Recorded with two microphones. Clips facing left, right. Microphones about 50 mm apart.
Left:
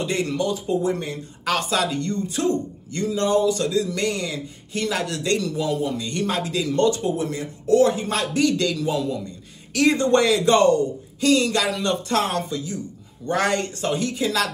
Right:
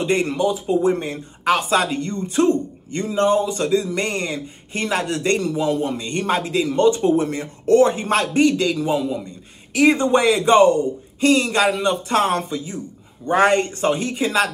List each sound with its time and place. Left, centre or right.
0.0 s speech: right
0.4 s speech: centre
0.8 s speech: right
1.7 s a man's voice: right
7.0 s a man's voice: right
8.7 s speech: right
12.1 s a man's voice: right